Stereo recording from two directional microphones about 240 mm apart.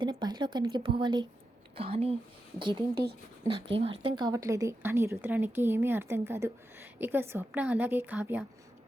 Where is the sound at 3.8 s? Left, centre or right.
Centre.